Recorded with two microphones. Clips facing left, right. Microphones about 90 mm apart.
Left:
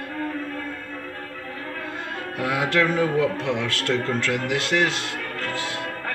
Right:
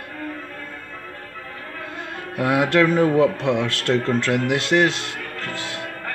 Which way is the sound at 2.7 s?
55° right (ahead or behind).